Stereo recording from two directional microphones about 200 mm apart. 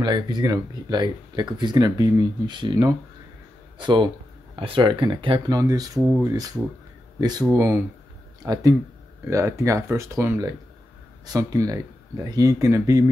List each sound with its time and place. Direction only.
0.0 s speech: 20° right (ahead or behind)
5.9 s speech: 5° right (ahead or behind)